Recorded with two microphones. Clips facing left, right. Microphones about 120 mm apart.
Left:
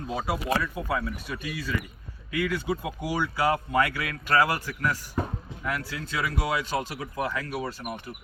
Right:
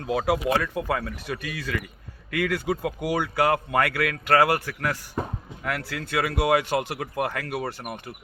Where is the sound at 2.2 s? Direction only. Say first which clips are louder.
Right 2 dB; 80° right.